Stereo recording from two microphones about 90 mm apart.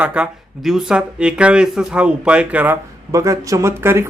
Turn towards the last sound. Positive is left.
turn(degrees=-30)  # may be behind; listen again after turning